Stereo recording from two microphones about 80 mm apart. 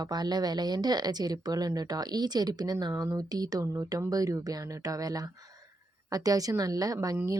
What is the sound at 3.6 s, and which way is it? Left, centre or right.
Speech, right.